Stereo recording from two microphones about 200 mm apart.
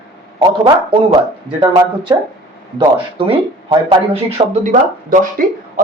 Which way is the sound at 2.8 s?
25° right (ahead or behind).